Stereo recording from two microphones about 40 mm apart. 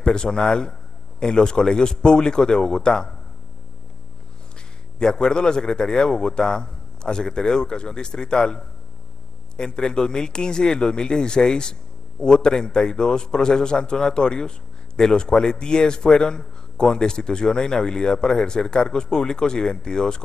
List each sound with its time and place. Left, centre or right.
0.0 s a man's voice: centre
4.9 s a man's voice: centre